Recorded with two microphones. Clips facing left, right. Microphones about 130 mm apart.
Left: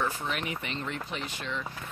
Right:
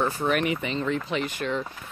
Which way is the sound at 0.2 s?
55° right (ahead or behind).